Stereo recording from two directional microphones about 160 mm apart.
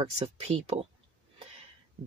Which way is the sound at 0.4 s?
40° right (ahead or behind).